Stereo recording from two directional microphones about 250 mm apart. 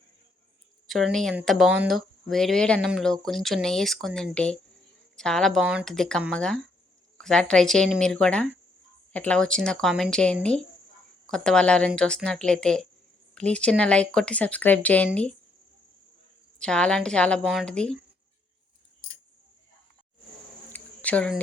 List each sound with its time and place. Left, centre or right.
0.9 s speech: centre
16.6 s speech: centre
20.7 s a sound: centre